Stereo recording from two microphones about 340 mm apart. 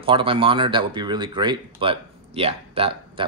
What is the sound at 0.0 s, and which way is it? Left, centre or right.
Speech, centre.